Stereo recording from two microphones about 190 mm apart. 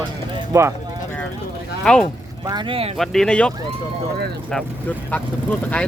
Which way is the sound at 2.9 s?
Centre (ahead or behind).